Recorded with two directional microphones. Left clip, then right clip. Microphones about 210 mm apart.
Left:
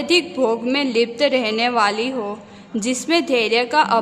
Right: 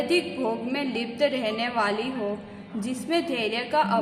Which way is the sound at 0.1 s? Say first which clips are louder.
Left 8 dB; 40° left (ahead or behind).